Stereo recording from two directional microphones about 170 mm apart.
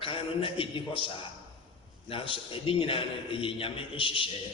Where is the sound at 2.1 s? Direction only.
30° left (ahead or behind).